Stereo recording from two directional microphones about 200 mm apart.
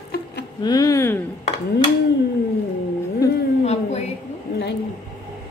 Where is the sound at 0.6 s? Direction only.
20° left (ahead or behind).